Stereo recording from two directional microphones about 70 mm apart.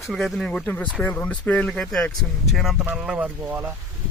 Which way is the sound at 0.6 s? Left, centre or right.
Left.